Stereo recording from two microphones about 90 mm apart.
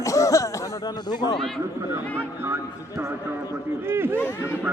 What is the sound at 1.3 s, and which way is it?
Speech, 5° left (ahead or behind).